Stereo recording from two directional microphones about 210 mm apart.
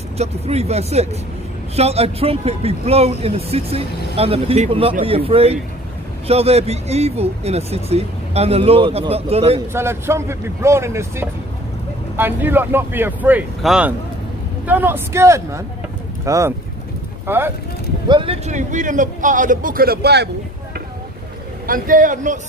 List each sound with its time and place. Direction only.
0.2 s a man's voice: 30° right (ahead or behind)
9.7 s speech: 10° right (ahead or behind)
18.0 s a man's voice: 25° right (ahead or behind); by 20.2 s 50° right (ahead or behind)
21.6 s a man's voice: 40° right (ahead or behind)